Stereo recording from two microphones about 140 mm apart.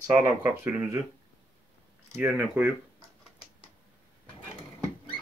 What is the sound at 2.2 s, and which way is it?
Speech, 10° right (ahead or behind).